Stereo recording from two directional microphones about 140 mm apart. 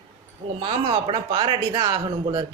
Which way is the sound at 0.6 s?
40° right (ahead or behind).